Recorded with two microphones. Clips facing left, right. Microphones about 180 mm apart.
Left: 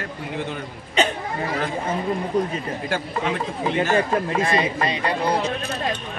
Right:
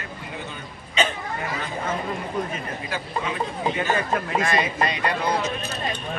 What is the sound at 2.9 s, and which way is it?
Speech, 60° left (ahead or behind).